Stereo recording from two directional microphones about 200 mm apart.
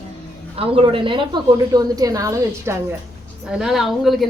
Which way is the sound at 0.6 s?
30° right (ahead or behind).